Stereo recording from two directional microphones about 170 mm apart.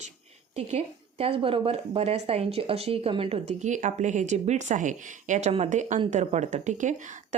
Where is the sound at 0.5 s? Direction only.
40° right (ahead or behind).